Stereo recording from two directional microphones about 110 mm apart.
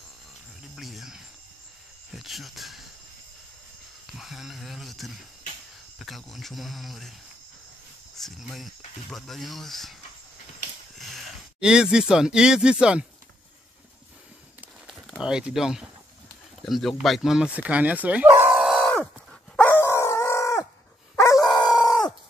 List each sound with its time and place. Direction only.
0.7 s cricket: centre (ahead or behind)
2.1 s speech: centre (ahead or behind)
4.2 s a sound: centre (ahead or behind)
5.9 s speech: centre (ahead or behind)
8.2 s speech: centre (ahead or behind)
11.0 s speech: 5° right (ahead or behind)
14.9 s speech: 5° right (ahead or behind)
18.5 s a sound: 5° right (ahead or behind)
19.5 s dog: 20° left (ahead or behind); by 21.7 s 40° left (ahead or behind)